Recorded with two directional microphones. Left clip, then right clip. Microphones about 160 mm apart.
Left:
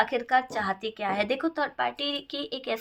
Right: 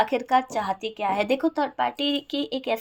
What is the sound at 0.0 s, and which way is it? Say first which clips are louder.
Speech: right 3 dB; 25° right (ahead or behind).